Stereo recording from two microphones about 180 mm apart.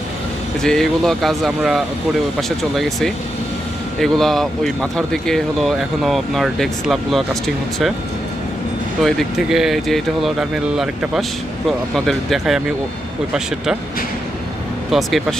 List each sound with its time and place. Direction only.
0.6 s speech: 5° left (ahead or behind)
9.0 s speech: centre (ahead or behind)
14.9 s speech: centre (ahead or behind)